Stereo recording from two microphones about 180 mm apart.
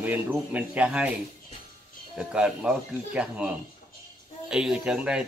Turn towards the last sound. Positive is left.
turn(degrees=-5)  # may be behind; listen again after turning